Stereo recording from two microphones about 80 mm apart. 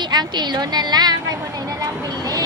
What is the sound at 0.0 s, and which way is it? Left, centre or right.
A woman's voice, right.